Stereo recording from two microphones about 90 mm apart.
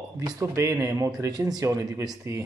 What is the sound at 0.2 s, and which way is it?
A man's voice, 35° right (ahead or behind).